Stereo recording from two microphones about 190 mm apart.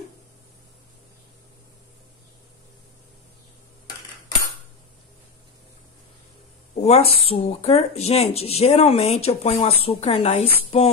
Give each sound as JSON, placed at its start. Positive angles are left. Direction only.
{"t": 6.7, "sound": "speech", "side_deg": 35}